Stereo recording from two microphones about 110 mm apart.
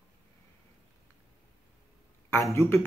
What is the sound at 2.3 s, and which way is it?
Speech, 25° left (ahead or behind).